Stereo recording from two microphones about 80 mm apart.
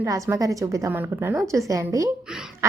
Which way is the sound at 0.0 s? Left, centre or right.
Right.